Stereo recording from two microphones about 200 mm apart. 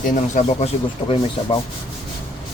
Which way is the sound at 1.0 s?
25° left (ahead or behind).